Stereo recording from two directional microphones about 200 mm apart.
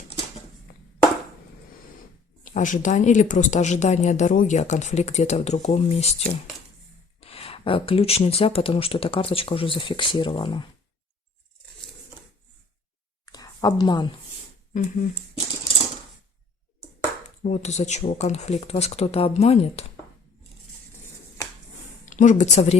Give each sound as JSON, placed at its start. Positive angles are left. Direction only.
{"t": 0.7, "sound": "a sound", "side_deg": 45}
{"t": 2.4, "sound": "speech", "side_deg": 40}
{"t": 13.2, "sound": "a sound", "side_deg": 20}
{"t": 14.7, "sound": "speech", "side_deg": 45}
{"t": 17.2, "sound": "speech", "side_deg": 35}
{"t": 22.0, "sound": "speech", "side_deg": 40}